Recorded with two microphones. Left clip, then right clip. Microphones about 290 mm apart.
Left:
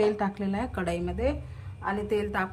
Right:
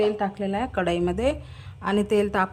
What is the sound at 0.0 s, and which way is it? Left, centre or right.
Speech, centre.